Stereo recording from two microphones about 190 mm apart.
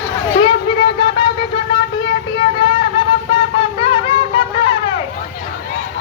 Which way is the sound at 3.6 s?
30° left (ahead or behind).